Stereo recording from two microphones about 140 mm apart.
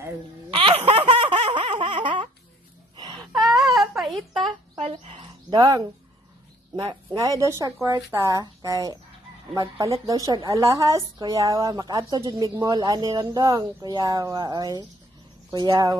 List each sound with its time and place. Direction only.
0.5 s a sound: 40° right (ahead or behind)
3.0 s wail: 30° right (ahead or behind)
3.3 s baby cry: centre (ahead or behind)
5.5 s speech: 25° right (ahead or behind)
6.9 s speech: 25° right (ahead or behind)